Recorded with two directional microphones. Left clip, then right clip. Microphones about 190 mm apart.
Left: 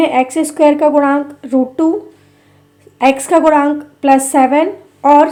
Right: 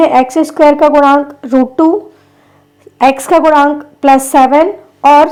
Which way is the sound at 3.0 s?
25° right (ahead or behind).